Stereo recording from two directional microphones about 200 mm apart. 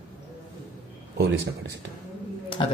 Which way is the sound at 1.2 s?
60° right (ahead or behind).